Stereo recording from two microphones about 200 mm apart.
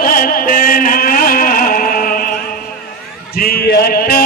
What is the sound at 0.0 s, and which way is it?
Music, 45° left (ahead or behind).